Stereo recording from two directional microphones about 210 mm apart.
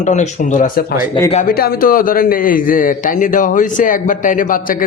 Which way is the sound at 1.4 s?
45° left (ahead or behind).